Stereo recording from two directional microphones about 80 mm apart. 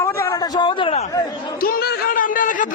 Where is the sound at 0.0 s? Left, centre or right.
Left.